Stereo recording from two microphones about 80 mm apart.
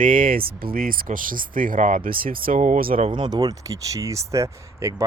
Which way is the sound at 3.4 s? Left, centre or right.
Right.